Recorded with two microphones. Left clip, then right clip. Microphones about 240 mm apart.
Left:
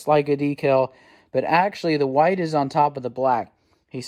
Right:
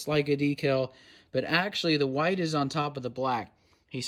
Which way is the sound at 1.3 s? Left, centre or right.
Centre.